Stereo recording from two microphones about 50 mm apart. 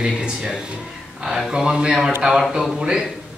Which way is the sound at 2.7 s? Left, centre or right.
Centre.